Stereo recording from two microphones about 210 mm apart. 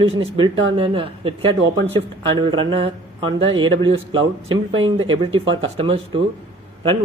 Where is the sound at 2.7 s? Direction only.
25° right (ahead or behind).